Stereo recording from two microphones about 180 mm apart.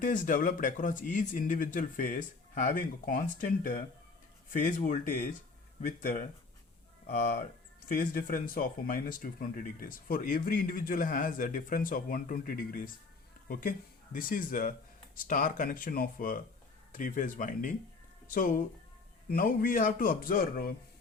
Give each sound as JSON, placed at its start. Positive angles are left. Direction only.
{"t": 0.0, "sound": "speech", "side_deg": 45}
{"t": 7.9, "sound": "speech", "side_deg": 50}